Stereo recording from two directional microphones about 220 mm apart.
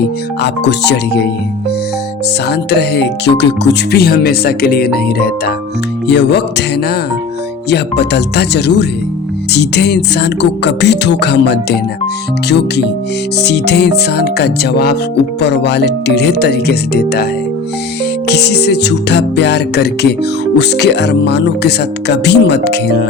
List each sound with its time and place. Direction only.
0.4 s speech: 50° left (ahead or behind)
2.5 s speech: 50° left (ahead or behind)
7.7 s speech: 50° left (ahead or behind)
18.3 s speech: 50° left (ahead or behind)